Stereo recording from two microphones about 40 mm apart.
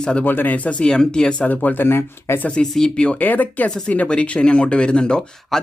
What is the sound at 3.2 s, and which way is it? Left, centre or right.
Speech, left.